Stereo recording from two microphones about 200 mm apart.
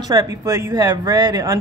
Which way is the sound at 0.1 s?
15° right (ahead or behind).